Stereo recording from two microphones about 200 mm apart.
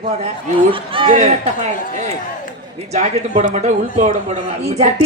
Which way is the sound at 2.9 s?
30° right (ahead or behind).